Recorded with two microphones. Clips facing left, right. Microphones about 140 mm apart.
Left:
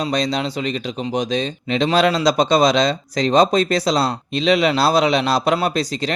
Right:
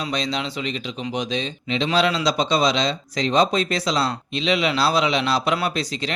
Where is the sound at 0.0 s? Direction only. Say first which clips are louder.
Left 5 dB; 40° left (ahead or behind).